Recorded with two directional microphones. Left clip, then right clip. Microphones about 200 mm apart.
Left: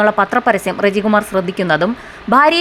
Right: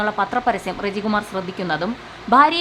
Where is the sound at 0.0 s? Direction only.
20° left (ahead or behind).